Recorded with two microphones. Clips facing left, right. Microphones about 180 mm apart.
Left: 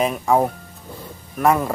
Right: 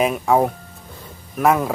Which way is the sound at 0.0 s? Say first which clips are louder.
Right 1 dB; centre (ahead or behind).